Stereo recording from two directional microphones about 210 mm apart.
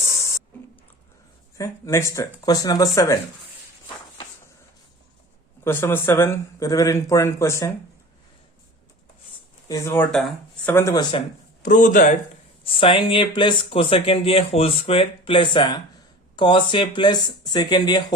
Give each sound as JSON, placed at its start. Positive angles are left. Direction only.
{"t": 1.5, "sound": "speech", "side_deg": 15}
{"t": 5.6, "sound": "speech", "side_deg": 10}
{"t": 9.6, "sound": "speech", "side_deg": 15}
{"t": 10.8, "sound": "speech", "side_deg": 15}
{"t": 11.6, "sound": "speech", "side_deg": 40}
{"t": 12.6, "sound": "speech", "side_deg": 25}